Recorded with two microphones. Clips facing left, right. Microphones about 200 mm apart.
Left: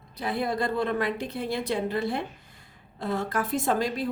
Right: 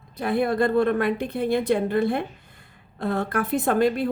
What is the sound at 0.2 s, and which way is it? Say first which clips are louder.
A woman's voice: right 6 dB; 55° right (ahead or behind).